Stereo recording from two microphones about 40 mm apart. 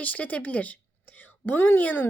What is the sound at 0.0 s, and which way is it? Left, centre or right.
Speech, left.